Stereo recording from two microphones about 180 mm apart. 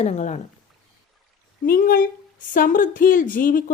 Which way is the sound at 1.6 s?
55° left (ahead or behind).